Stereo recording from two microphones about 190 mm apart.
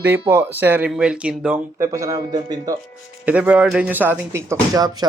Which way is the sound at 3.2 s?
5° right (ahead or behind).